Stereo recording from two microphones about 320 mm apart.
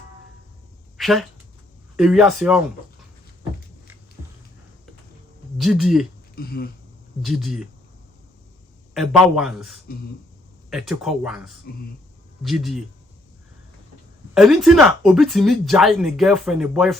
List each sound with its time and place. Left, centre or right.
0.9 s a sound: centre
2.0 s speech: centre
5.5 s speech: centre
6.3 s a sound: left
7.2 s speech: centre
9.0 s speech: centre
14.3 s speech: centre